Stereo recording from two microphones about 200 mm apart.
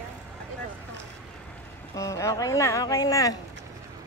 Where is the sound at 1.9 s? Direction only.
15° left (ahead or behind).